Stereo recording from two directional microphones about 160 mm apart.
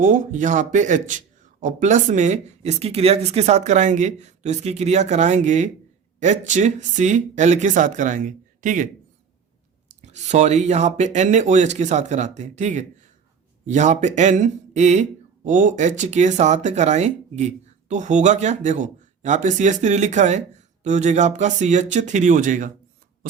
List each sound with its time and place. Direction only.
0.0 s speech: 55° right (ahead or behind)
10.0 s speech: 45° right (ahead or behind)